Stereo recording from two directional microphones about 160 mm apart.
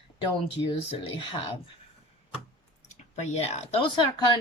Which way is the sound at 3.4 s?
40° left (ahead or behind).